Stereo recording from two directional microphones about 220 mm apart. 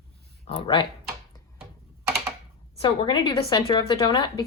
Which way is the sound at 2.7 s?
25° left (ahead or behind).